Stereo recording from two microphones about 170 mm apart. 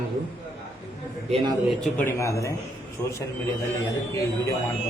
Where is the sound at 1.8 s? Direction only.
10° left (ahead or behind).